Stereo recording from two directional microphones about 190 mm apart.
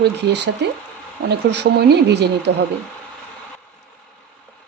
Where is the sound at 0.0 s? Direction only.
60° right (ahead or behind).